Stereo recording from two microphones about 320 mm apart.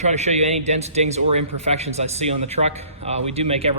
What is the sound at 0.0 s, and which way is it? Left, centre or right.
Speech, right.